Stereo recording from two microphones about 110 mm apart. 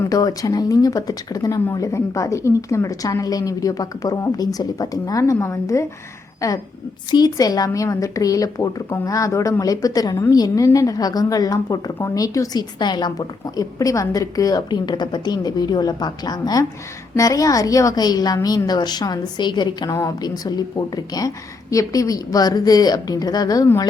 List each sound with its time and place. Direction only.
0.1 s a woman's voice: 35° left (ahead or behind)